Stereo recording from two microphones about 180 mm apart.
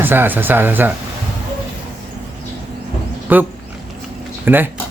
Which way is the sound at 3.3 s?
10° right (ahead or behind).